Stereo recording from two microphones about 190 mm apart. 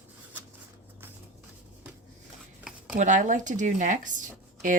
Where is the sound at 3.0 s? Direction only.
40° right (ahead or behind).